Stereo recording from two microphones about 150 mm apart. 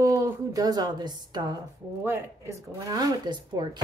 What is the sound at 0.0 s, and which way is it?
A woman's voice, 20° right (ahead or behind).